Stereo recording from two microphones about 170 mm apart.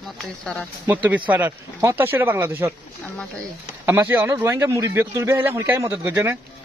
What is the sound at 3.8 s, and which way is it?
Speech, 15° right (ahead or behind).